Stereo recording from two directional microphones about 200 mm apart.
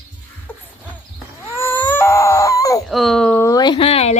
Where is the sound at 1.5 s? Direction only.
10° left (ahead or behind).